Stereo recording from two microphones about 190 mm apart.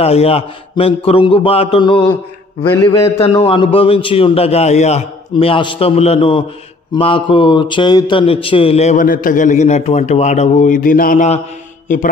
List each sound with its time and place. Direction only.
0.0 s a man's voice: 30° left (ahead or behind)
9.0 s a man's voice: 45° left (ahead or behind)